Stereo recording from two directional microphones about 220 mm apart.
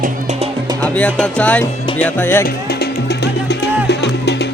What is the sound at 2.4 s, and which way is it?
Music, 45° left (ahead or behind).